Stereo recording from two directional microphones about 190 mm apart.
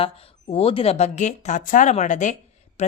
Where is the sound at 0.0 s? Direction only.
30° left (ahead or behind).